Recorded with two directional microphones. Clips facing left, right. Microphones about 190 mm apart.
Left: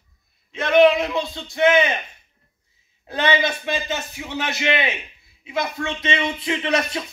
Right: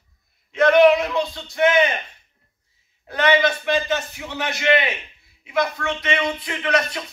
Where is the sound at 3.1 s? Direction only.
25° left (ahead or behind).